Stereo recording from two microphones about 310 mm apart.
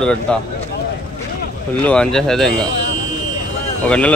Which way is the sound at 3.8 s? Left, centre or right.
Centre.